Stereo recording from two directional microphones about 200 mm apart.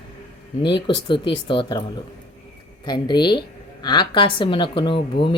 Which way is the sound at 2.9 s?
20° left (ahead or behind).